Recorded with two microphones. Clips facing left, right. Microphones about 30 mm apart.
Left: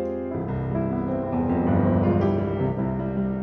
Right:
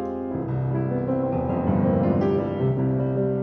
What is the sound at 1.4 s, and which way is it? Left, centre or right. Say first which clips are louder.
Music: left 1 dB; left.